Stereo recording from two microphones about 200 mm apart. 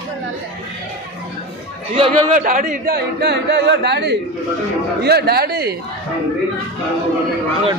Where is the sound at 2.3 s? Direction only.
40° right (ahead or behind).